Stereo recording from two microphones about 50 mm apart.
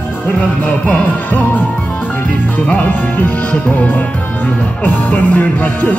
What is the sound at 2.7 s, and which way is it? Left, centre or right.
Music, left.